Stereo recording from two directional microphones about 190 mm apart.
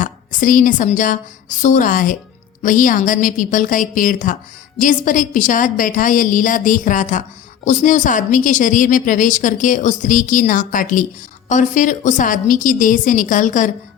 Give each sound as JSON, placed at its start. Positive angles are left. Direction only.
{"t": 0.0, "sound": "a woman's voice", "side_deg": 45}